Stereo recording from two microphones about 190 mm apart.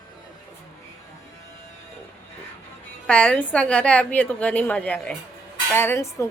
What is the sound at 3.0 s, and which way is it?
A woman's voice, 5° left (ahead or behind).